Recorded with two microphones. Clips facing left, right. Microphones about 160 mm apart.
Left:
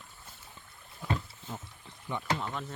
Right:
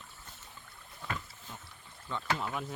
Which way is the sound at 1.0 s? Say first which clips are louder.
Left 6 dB; 10° left (ahead or behind).